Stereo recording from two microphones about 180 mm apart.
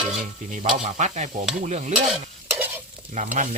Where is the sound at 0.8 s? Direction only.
40° right (ahead or behind).